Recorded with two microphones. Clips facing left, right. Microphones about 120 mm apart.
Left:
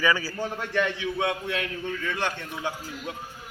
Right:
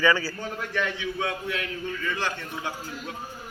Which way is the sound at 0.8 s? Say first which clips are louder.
Left 3 dB; 25° left (ahead or behind).